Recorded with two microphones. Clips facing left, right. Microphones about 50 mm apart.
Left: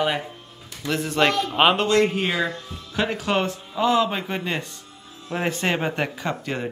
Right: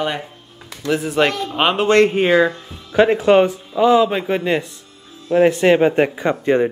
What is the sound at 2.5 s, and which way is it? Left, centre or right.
Speech, right.